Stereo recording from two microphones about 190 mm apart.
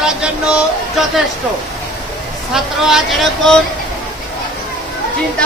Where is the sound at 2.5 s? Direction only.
Centre (ahead or behind).